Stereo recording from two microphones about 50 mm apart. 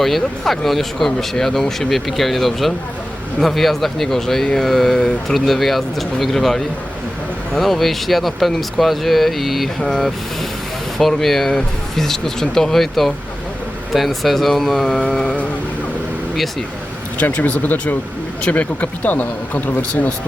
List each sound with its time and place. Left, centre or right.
0.0 s speech: centre
9.8 s speech: centre
17.3 s speech: left